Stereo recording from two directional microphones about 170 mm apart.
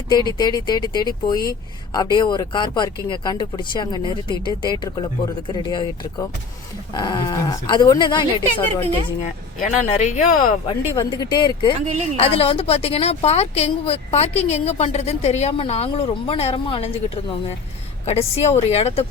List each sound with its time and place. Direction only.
0.1 s speech: 25° left (ahead or behind)
9.6 s speech: 50° left (ahead or behind)
10.9 s a woman's voice: 25° left (ahead or behind)
18.0 s a woman's voice: 35° left (ahead or behind)